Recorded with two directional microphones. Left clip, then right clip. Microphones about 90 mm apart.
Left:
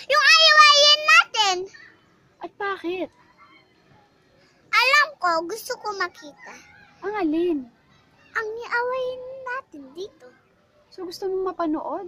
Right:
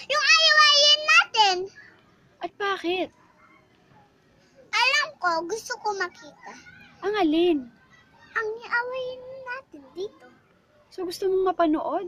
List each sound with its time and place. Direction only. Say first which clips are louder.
0.0 s child singing: left 4 dB; 85° left
0.6 s child singing: left 4 dB; 45° left (ahead or behind)
2.3 s a sound: right 1 dB; 5° left (ahead or behind)
4.6 s a child's voice: left 5 dB; 75° left (ahead or behind); by 6.7 s 55° left (ahead or behind)
7.0 s speech: right 2 dB; 5° left (ahead or behind)
8.3 s a child's voice: left 1 dB; 50° left (ahead or behind)
11.0 s speech: right 3 dB; 15° right (ahead or behind)